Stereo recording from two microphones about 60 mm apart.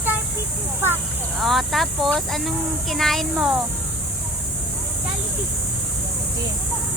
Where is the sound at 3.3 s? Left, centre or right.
Centre.